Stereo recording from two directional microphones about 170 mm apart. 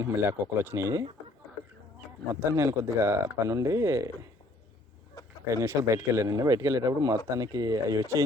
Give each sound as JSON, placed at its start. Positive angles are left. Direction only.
{"t": 0.0, "sound": "speech", "side_deg": -15}
{"t": 2.3, "sound": "speech", "side_deg": -15}
{"t": 5.2, "sound": "a sound", "side_deg": 25}
{"t": 5.5, "sound": "speech", "side_deg": -15}